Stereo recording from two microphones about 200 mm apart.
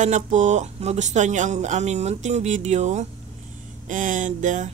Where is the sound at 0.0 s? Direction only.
35° right (ahead or behind).